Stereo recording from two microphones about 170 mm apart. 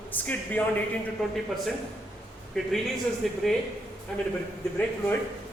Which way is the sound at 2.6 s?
Centre (ahead or behind).